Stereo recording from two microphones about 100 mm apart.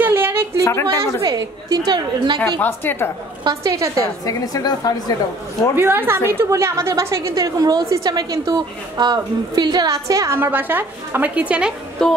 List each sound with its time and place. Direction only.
0.0 s a sound: 20° right (ahead or behind)
0.7 s a woman's voice: 30° left (ahead or behind)
1.2 s a woman's voice: 40° right (ahead or behind)
2.6 s a woman's voice: 20° left (ahead or behind)
3.4 s a woman's voice: 35° right (ahead or behind)
4.3 s a woman's voice: 40° left (ahead or behind)
5.8 s a woman's voice: 20° right (ahead or behind)
12.0 s music: 5° left (ahead or behind)